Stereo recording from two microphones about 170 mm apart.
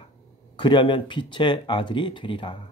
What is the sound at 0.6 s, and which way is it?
Speech, 30° left (ahead or behind).